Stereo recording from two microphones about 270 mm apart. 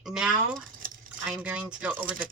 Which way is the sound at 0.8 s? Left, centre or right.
Right.